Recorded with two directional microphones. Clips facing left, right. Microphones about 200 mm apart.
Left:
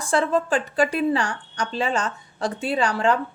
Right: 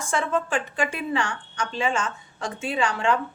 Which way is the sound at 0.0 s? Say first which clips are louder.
Left 4 dB; 35° left (ahead or behind).